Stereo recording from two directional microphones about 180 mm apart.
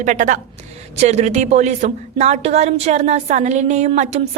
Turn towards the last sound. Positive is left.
turn(degrees=-40)  # may be behind; listen again after turning